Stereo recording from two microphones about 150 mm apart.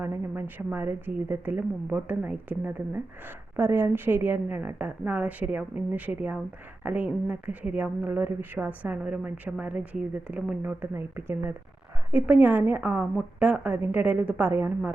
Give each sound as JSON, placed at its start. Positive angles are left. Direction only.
{"t": 0.0, "sound": "speech", "side_deg": -15}